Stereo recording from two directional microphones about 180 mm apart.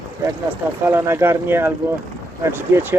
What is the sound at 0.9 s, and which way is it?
Speech, 15° right (ahead or behind).